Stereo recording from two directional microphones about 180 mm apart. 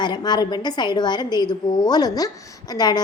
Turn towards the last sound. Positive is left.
turn(degrees=20)  # may be behind; listen again after turning